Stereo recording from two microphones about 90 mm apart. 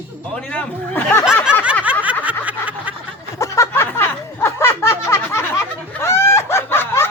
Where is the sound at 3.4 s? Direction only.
30° left (ahead or behind).